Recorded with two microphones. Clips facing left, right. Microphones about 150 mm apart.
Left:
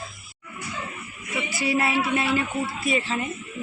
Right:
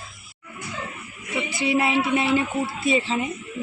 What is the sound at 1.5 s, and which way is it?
Speech, 20° right (ahead or behind).